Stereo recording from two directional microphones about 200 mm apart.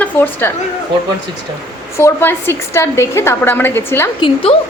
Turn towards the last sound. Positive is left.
turn(degrees=25)  # may be behind; listen again after turning